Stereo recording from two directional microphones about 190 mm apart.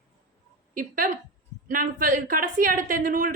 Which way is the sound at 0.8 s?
45° right (ahead or behind).